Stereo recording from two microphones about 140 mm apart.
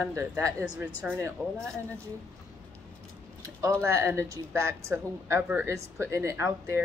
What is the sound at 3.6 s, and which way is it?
A woman's voice, 20° right (ahead or behind).